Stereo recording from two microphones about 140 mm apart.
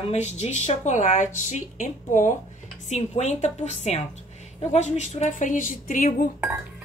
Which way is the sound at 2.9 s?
55° left (ahead or behind).